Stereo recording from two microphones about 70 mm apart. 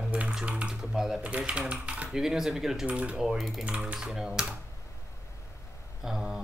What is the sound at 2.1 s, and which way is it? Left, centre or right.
Speech, centre.